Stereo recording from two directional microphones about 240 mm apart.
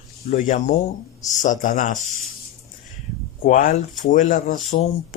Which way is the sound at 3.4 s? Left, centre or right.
Left.